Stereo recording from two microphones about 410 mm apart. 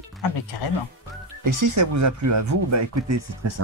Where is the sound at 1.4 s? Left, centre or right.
Right.